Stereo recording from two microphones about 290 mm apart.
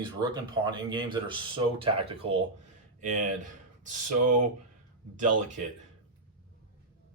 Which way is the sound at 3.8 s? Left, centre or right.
Right.